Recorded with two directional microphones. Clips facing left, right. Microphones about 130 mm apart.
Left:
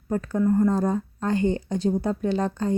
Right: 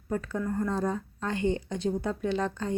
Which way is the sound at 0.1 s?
40° left (ahead or behind).